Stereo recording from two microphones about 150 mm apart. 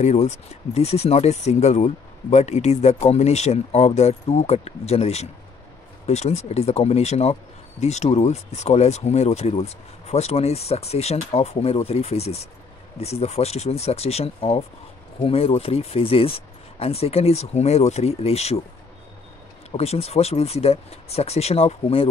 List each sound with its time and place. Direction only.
0.0 s speech: 50° left (ahead or behind)
19.7 s speech: 45° left (ahead or behind)